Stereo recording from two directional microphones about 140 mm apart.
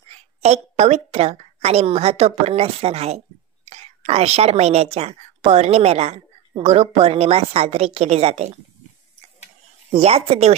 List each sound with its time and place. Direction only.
0.1 s a woman's voice: 50° right (ahead or behind)
9.8 s a woman's voice: 45° right (ahead or behind)